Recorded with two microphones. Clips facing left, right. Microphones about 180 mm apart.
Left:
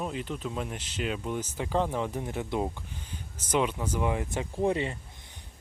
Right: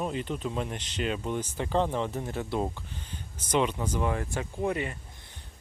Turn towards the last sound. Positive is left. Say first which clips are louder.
# left 2 dB
turn(degrees=25)  # may be behind; listen again after turning